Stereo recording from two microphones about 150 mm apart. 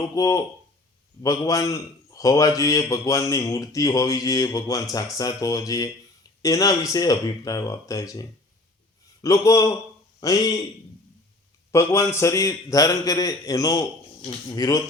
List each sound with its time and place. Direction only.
0.0 s a man's voice: 20° left (ahead or behind)
9.2 s a man's voice: 20° left (ahead or behind)
11.7 s a man's voice: 20° left (ahead or behind)